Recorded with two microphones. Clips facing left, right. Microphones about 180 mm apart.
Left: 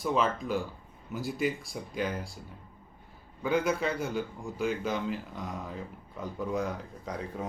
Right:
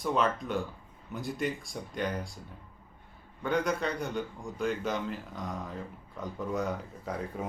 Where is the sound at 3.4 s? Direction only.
5° left (ahead or behind).